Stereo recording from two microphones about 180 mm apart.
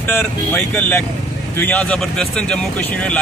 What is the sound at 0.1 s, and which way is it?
A man's voice, 10° left (ahead or behind).